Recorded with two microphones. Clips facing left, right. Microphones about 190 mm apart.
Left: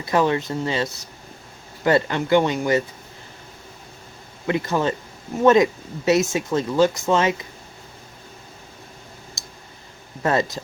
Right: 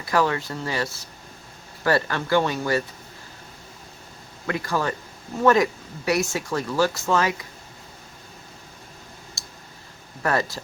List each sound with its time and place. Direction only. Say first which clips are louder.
0.0 s speech: left 3 dB; 20° left (ahead or behind)
4.4 s speech: left 4 dB; 20° left (ahead or behind)
9.4 s clicking: left 2 dB; 20° left (ahead or behind)
10.2 s speech: left 3 dB; 20° left (ahead or behind)